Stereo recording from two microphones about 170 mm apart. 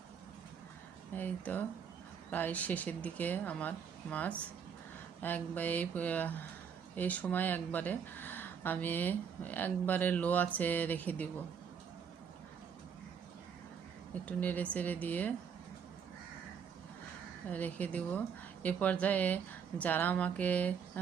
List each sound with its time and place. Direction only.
1.1 s speech: 10° left (ahead or behind)
14.3 s speech: 10° left (ahead or behind)
17.5 s speech: 10° left (ahead or behind)